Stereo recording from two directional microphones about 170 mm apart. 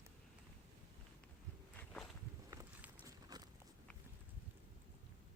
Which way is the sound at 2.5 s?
10° right (ahead or behind).